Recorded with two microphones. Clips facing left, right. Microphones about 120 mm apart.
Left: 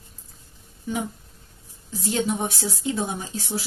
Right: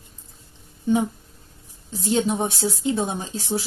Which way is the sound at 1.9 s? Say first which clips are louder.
Right 3 dB; 25° right (ahead or behind).